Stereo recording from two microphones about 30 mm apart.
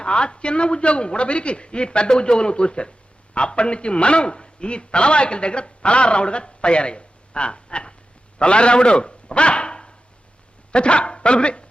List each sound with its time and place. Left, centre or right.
0.0 s a man's voice: left